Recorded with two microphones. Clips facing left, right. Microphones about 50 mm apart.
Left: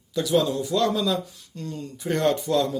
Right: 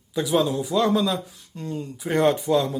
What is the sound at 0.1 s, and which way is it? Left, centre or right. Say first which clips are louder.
Speech: even; centre.